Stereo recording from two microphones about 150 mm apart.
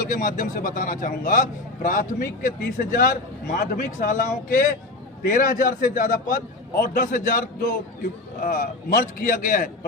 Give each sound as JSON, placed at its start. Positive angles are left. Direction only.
{"t": 0.0, "sound": "a man's voice", "side_deg": 60}